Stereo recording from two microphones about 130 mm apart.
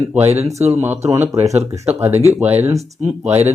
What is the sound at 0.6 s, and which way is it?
Speech, 60° right (ahead or behind).